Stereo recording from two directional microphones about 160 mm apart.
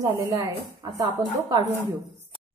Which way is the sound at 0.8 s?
20° right (ahead or behind).